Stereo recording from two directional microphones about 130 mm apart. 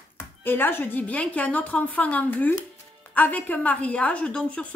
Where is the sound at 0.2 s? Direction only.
15° left (ahead or behind).